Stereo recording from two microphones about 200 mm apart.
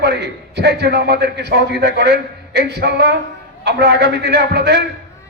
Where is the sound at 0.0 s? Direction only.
60° right (ahead or behind).